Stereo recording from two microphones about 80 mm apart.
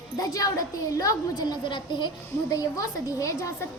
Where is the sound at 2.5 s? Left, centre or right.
Left.